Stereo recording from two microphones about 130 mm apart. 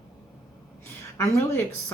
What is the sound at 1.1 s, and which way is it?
Speech, 20° left (ahead or behind).